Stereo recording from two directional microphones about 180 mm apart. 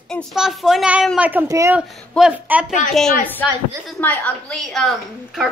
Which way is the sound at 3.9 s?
10° left (ahead or behind).